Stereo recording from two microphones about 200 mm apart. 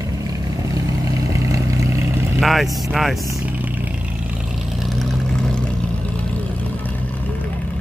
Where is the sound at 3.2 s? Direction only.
10° right (ahead or behind).